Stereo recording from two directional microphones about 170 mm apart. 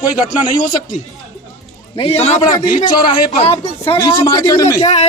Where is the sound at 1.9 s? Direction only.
35° left (ahead or behind); by 4.8 s 20° left (ahead or behind).